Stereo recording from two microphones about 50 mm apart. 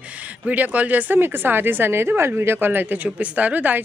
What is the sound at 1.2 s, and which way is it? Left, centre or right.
A woman's voice, right.